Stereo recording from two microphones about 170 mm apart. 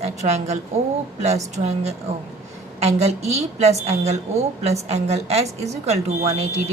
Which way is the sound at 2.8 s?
40° right (ahead or behind).